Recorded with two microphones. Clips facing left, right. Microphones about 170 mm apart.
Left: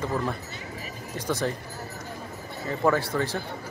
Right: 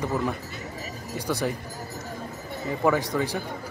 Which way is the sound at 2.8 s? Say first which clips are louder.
Even; 15° right (ahead or behind).